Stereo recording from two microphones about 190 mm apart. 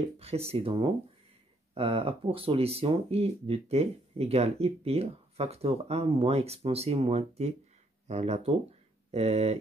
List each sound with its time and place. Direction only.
0.2 s speech: 30° right (ahead or behind)